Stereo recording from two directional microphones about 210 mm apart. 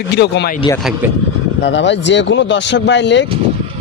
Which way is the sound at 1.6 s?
55° left (ahead or behind).